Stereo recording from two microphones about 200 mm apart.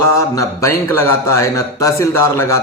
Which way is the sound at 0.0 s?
15° left (ahead or behind).